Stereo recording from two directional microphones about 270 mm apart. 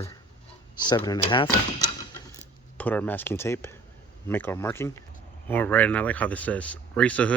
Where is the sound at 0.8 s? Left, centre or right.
Centre.